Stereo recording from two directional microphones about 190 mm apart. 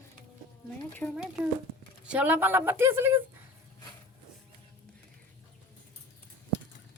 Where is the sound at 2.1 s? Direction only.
10° right (ahead or behind).